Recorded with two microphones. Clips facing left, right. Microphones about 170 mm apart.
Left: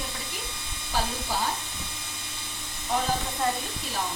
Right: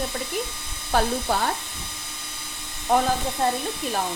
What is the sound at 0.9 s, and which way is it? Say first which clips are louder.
Speech: right 7 dB; 60° right (ahead or behind).